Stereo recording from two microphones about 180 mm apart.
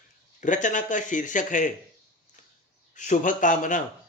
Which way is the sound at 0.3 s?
45° left (ahead or behind).